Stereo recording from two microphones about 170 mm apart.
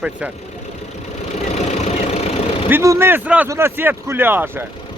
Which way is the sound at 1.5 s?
40° left (ahead or behind).